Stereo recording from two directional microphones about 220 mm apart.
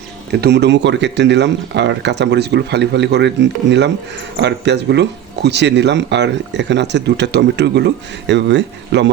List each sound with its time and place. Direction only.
0.3 s speech: 50° right (ahead or behind)